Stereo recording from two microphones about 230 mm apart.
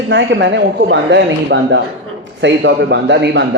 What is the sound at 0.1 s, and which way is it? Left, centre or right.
A man's voice, right.